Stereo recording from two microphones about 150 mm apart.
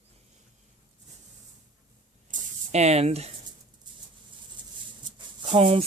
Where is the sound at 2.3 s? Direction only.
60° right (ahead or behind).